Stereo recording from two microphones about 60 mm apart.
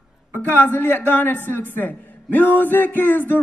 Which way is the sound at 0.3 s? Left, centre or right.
Left.